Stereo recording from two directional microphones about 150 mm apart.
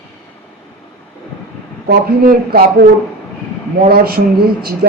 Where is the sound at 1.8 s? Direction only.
90° right.